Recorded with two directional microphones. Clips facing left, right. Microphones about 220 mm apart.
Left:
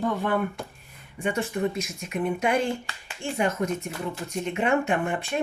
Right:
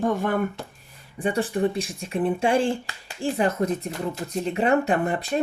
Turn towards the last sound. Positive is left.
turn(degrees=-35)  # may be behind; listen again after turning